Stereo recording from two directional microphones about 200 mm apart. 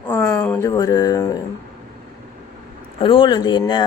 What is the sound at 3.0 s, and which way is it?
Speech, 25° left (ahead or behind).